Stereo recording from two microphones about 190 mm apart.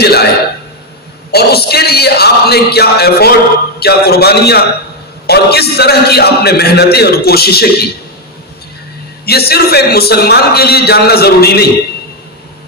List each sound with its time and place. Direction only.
0.0 s speech: 55° left (ahead or behind)
1.3 s a man's voice: 55° left (ahead or behind)
9.2 s a man's voice: 55° left (ahead or behind)